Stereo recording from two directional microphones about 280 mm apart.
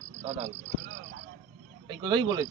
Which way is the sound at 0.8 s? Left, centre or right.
Right.